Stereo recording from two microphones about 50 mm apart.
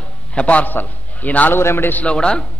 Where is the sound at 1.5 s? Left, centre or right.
Left.